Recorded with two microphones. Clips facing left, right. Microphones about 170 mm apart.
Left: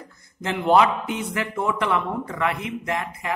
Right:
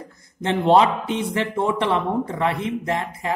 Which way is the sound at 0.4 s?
30° right (ahead or behind).